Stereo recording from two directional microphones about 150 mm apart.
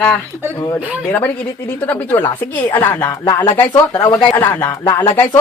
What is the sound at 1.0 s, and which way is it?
Speech, 10° left (ahead or behind).